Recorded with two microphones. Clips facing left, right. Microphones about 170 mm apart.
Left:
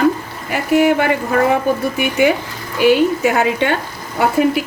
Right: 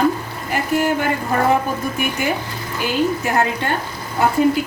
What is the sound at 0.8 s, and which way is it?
Speech, 70° left (ahead or behind).